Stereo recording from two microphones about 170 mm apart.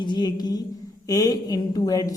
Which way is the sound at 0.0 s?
25° left (ahead or behind).